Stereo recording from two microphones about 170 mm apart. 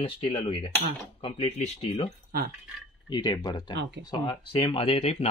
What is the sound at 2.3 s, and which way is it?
Speech, 65° right (ahead or behind).